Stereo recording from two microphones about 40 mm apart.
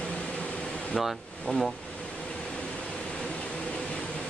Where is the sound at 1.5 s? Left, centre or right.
Left.